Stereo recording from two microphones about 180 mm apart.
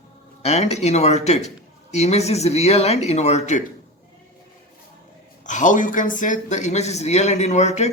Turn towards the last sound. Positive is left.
turn(degrees=40)  # may be behind; listen again after turning